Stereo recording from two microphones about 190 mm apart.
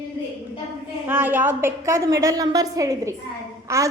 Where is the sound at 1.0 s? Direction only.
10° right (ahead or behind).